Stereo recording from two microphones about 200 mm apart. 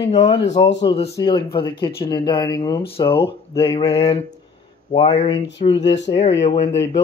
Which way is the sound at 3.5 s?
25° left (ahead or behind).